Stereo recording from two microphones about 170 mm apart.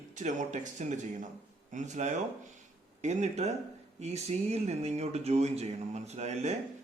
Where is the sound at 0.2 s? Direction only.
45° right (ahead or behind).